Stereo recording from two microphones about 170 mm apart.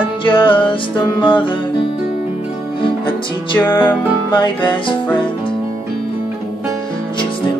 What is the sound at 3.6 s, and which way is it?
Music, 10° left (ahead or behind).